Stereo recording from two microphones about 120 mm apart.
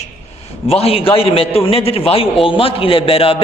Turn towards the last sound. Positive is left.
turn(degrees=50)  # may be behind; listen again after turning